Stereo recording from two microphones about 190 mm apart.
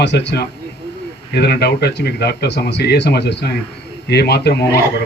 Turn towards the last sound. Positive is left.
turn(degrees=60)  # may be behind; listen again after turning